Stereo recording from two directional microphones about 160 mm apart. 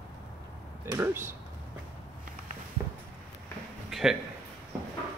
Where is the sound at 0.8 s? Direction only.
15° right (ahead or behind).